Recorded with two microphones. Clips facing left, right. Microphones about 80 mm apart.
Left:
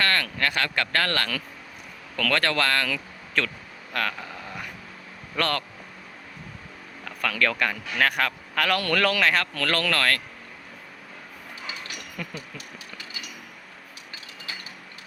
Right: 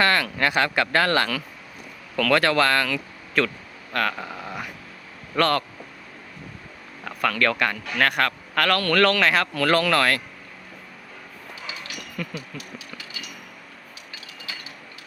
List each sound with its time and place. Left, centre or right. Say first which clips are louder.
0.0 s speech: right 4 dB; centre
7.0 s a man's voice: right 3 dB; centre
12.2 s a sound: right 4 dB; centre